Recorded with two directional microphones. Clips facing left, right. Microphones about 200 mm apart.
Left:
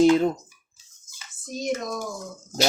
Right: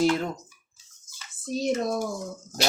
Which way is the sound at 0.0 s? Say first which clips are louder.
Left 6 dB; 20° left (ahead or behind).